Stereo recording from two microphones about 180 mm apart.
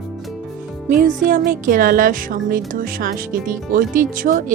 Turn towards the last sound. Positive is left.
turn(degrees=-50)  # may be behind; listen again after turning